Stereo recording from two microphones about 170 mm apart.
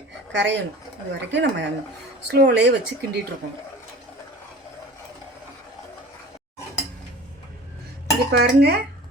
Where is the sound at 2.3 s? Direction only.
75° right (ahead or behind).